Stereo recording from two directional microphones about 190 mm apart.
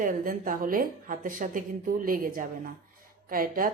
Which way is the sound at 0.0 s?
45° right (ahead or behind).